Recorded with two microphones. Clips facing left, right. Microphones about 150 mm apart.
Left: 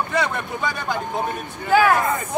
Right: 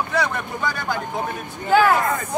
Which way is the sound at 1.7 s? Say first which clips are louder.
Even; 5° left (ahead or behind).